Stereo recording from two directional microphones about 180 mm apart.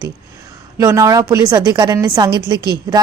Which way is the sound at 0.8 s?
15° right (ahead or behind).